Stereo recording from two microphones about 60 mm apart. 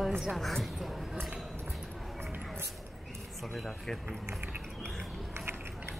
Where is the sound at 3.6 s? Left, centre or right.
Centre.